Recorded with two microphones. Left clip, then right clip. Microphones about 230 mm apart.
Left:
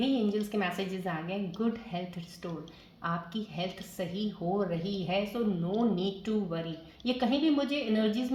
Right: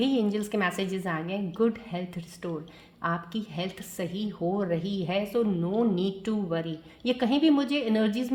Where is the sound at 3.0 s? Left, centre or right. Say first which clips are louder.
Right 4 dB; right.